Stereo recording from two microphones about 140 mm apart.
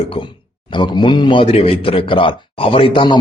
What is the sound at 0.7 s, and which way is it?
A man's voice, 35° left (ahead or behind).